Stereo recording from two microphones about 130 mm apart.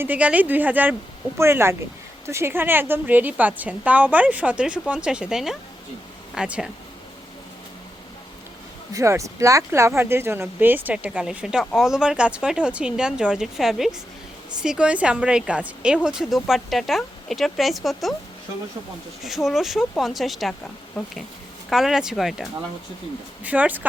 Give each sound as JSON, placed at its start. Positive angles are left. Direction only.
{"t": 0.0, "sound": "a woman's voice", "side_deg": -10}
{"t": 8.9, "sound": "a woman's voice", "side_deg": -25}
{"t": 19.2, "sound": "a woman's voice", "side_deg": 0}
{"t": 21.7, "sound": "a woman's voice", "side_deg": -5}
{"t": 23.4, "sound": "a woman's voice", "side_deg": -10}